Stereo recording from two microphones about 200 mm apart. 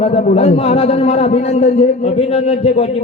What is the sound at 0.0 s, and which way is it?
A man's voice, 30° left (ahead or behind).